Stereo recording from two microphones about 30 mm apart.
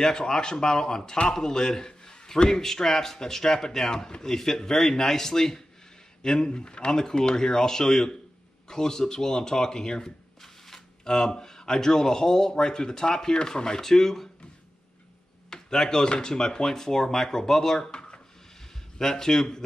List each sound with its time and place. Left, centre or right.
0.0 s a man's voice: left
2.6 s a man's voice: centre
15.5 s a man's voice: centre
17.9 s a sound: left
18.9 s a man's voice: centre